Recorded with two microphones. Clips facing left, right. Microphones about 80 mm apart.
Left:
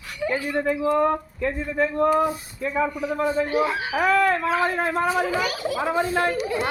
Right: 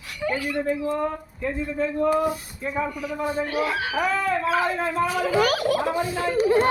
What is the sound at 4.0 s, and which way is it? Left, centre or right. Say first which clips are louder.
Speech: left 6 dB; left.